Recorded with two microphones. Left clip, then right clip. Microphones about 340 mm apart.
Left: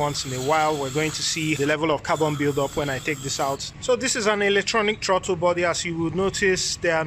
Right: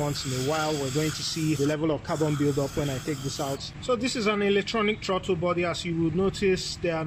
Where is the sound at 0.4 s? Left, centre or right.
Left.